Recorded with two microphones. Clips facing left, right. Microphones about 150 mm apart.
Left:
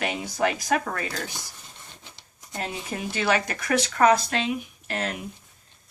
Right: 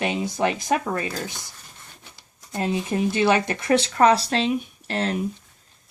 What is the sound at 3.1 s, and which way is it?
Speech, 25° right (ahead or behind).